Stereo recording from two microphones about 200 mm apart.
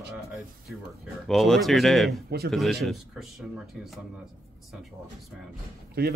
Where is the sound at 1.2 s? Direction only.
Centre (ahead or behind).